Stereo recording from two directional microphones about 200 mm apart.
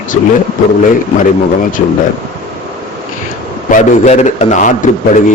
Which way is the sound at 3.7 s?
35° left (ahead or behind).